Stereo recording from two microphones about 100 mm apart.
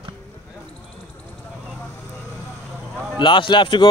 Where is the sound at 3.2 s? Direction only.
50° left (ahead or behind).